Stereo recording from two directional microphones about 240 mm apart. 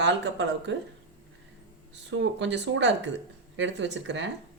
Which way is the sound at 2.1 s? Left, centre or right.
Right.